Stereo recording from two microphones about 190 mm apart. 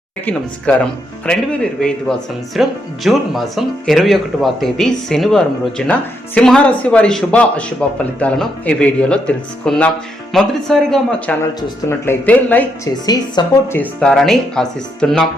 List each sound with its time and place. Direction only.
0.3 s speech: 5° left (ahead or behind)
13.1 s speech: 20° left (ahead or behind)
13.7 s speech: 5° left (ahead or behind)